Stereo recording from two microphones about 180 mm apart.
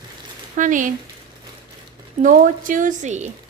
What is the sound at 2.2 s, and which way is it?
Speech, 45° right (ahead or behind).